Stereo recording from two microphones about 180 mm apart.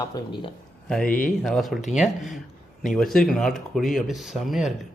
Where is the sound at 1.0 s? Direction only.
50° left (ahead or behind).